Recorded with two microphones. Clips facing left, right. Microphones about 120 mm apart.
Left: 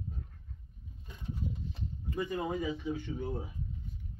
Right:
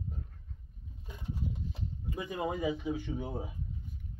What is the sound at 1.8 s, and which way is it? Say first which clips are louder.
Speech: left 7 dB; 10° right (ahead or behind).